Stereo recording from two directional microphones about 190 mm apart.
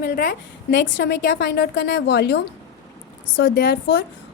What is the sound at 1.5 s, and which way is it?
A woman's voice, 60° left (ahead or behind).